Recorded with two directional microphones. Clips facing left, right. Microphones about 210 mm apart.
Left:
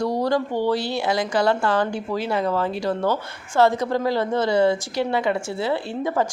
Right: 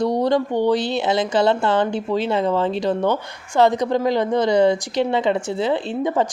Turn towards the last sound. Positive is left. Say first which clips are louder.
# right 3 dB
turn(degrees=-20)  # may be behind; listen again after turning